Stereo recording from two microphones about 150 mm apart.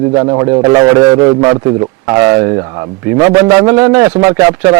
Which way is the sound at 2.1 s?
20° right (ahead or behind).